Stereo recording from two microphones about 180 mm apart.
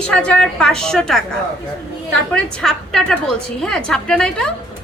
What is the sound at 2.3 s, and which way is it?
A woman's voice, 5° left (ahead or behind).